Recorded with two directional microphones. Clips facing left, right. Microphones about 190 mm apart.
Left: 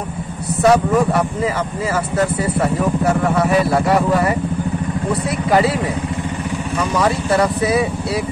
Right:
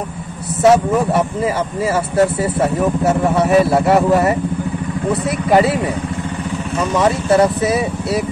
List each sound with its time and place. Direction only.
0.6 s a man's voice: 25° right (ahead or behind)
7.0 s a man's voice: 20° right (ahead or behind)
7.6 s speech: centre (ahead or behind)